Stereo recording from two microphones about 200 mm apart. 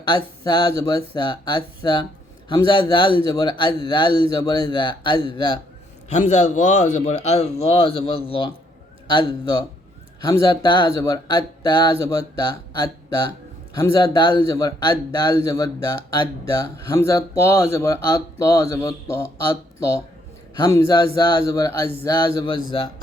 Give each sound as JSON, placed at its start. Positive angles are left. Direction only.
{"t": 0.0, "sound": "speech", "side_deg": 20}
{"t": 6.1, "sound": "a man's voice", "side_deg": 35}
{"t": 13.9, "sound": "a man's voice", "side_deg": 20}
{"t": 20.6, "sound": "a man's voice", "side_deg": 15}